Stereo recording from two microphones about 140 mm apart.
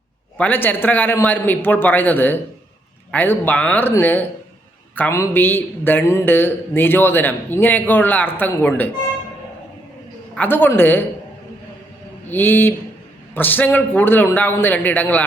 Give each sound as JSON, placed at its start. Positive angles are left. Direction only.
{"t": 0.3, "sound": "a man's voice", "side_deg": 10}
{"t": 10.3, "sound": "a man's voice", "side_deg": 15}
{"t": 12.3, "sound": "a man's voice", "side_deg": 15}